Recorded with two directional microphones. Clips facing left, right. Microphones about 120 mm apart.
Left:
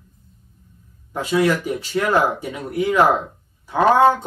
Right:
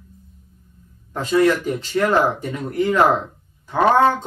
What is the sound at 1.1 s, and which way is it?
Speech, 10° left (ahead or behind).